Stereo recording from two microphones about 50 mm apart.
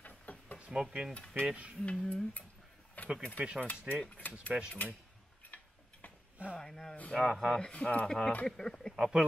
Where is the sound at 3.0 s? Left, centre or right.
Left.